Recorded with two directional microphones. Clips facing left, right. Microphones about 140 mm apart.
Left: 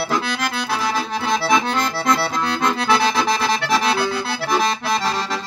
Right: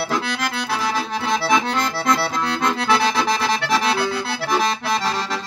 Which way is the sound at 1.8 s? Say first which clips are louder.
Left 1 dB; 15° left (ahead or behind).